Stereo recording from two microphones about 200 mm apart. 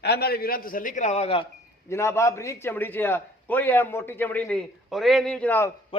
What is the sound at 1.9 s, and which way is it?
A man's voice, 15° left (ahead or behind).